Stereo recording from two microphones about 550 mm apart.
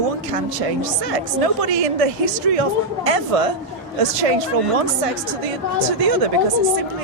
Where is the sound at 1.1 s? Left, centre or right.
Right.